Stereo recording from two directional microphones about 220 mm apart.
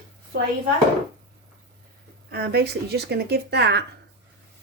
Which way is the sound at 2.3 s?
45° right (ahead or behind).